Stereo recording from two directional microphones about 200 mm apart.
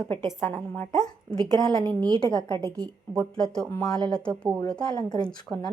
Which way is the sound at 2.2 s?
20° left (ahead or behind).